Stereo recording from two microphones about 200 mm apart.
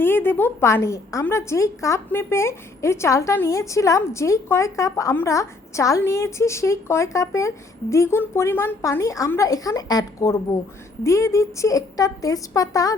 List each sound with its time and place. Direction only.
0.0 s a woman's voice: 10° left (ahead or behind)